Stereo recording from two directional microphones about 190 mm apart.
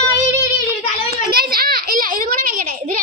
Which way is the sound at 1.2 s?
55° right (ahead or behind).